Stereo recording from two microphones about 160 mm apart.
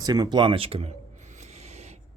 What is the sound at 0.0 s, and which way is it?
Speech, 25° right (ahead or behind).